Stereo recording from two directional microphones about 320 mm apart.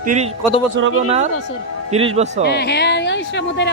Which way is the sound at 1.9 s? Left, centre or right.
Centre.